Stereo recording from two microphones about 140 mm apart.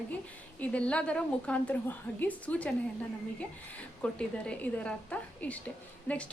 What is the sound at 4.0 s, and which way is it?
A woman's voice, 5° left (ahead or behind).